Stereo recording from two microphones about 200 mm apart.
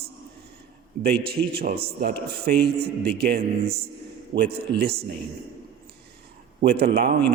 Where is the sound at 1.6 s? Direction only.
50° right (ahead or behind).